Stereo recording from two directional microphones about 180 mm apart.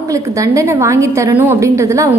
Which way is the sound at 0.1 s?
15° right (ahead or behind).